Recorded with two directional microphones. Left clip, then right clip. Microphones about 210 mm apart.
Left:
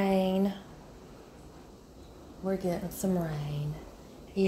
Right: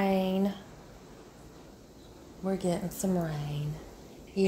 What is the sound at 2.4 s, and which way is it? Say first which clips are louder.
A woman's voice: even; 15° right (ahead or behind).